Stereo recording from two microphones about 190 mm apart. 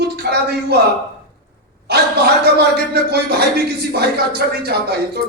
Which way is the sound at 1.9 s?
60° right (ahead or behind).